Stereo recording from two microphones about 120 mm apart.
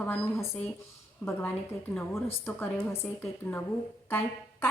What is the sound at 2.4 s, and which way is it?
A woman's voice, 20° left (ahead or behind).